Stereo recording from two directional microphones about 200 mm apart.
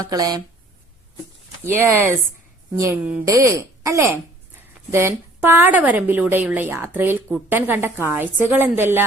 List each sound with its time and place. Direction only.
0.0 s a woman's voice: 20° right (ahead or behind)
1.7 s a woman's voice: 10° right (ahead or behind)